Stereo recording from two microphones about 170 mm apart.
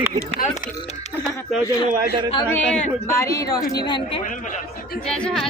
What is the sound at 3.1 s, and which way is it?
A woman's voice, 20° left (ahead or behind).